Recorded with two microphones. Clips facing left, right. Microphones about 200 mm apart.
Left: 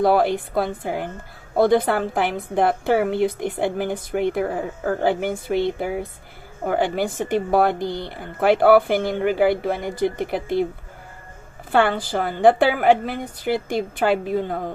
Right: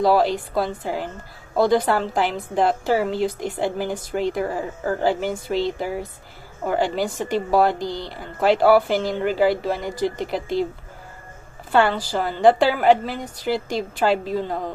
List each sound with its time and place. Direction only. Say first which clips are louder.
0.0 s a woman's voice: even; 55° left (ahead or behind)
11.7 s a woman's voice: even; 55° left (ahead or behind)